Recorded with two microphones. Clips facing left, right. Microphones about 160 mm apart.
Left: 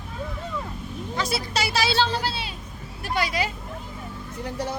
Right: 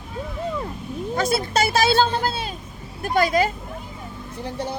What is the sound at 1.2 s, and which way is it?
Speech, 50° right (ahead or behind).